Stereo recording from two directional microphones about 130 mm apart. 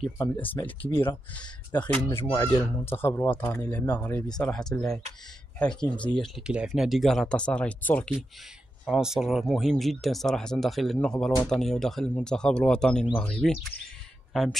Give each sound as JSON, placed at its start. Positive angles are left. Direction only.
{"t": 0.2, "sound": "speech", "side_deg": 15}
{"t": 8.8, "sound": "speech", "side_deg": -5}